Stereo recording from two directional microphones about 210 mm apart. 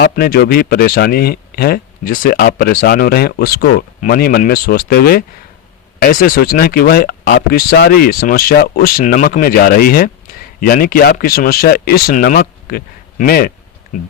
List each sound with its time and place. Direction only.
0.0 s speech: 45° left (ahead or behind)